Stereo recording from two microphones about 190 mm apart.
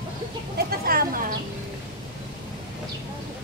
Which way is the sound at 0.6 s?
55° right (ahead or behind).